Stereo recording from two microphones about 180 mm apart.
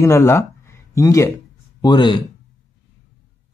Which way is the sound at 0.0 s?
15° left (ahead or behind).